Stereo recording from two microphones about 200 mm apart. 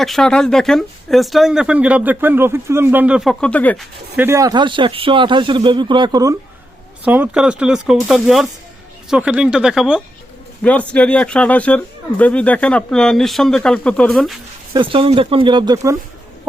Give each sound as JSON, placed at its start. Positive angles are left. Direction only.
{"t": 0.0, "sound": "speech", "side_deg": 0}
{"t": 4.2, "sound": "a man's voice", "side_deg": -15}
{"t": 7.0, "sound": "speech", "side_deg": -5}
{"t": 14.7, "sound": "a man's voice", "side_deg": -25}